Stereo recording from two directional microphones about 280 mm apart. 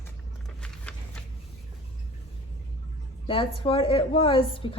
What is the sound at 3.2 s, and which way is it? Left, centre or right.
A woman's voice, centre.